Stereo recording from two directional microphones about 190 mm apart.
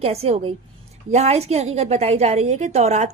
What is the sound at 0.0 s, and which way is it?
A woman's voice, 35° right (ahead or behind).